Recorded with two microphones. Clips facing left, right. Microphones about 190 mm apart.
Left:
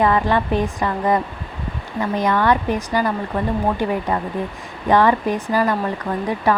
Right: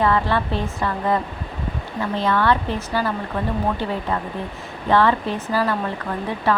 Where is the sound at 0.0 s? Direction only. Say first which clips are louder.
Left 2 dB; 15° left (ahead or behind).